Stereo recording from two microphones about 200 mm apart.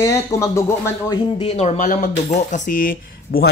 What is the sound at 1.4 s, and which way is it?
Speech, 30° left (ahead or behind).